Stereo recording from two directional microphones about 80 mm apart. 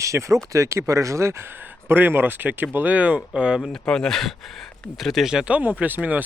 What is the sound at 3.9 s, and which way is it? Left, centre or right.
Speech, centre.